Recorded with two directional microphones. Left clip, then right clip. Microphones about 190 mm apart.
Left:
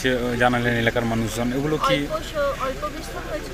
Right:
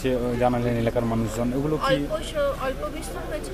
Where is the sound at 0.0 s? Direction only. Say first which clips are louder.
Left 3 dB; centre (ahead or behind).